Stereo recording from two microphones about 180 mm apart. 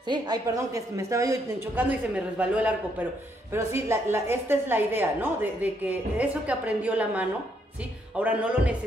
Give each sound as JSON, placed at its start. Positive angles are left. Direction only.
{"t": 0.1, "sound": "a woman's voice", "side_deg": -20}